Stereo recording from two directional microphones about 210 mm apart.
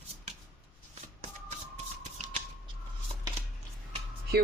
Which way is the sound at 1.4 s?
35° right (ahead or behind).